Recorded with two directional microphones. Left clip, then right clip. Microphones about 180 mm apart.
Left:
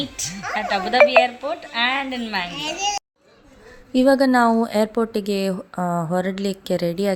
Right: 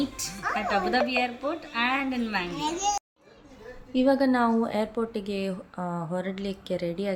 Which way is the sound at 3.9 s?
50° left (ahead or behind).